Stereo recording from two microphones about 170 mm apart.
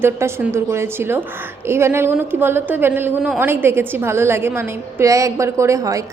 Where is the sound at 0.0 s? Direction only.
15° right (ahead or behind).